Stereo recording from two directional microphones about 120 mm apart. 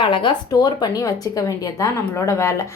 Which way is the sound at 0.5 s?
30° left (ahead or behind).